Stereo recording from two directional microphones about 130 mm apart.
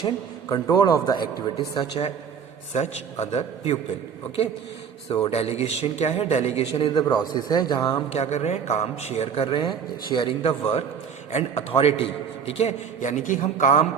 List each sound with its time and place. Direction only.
0.5 s a man's voice: 30° left (ahead or behind)
2.7 s a man's voice: 55° left (ahead or behind)
5.2 s a man's voice: 55° left (ahead or behind)
6.7 s a man's voice: 40° left (ahead or behind)
8.1 s a man's voice: 60° left (ahead or behind); by 10.5 s 40° left (ahead or behind)
11.3 s a man's voice: 55° left (ahead or behind)
12.5 s a man's voice: 65° left (ahead or behind)